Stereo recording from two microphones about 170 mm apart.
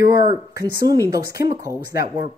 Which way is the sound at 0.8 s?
20° right (ahead or behind).